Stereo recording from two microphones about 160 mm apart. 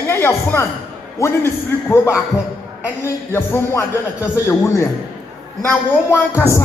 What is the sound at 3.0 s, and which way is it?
A man's voice, 15° left (ahead or behind).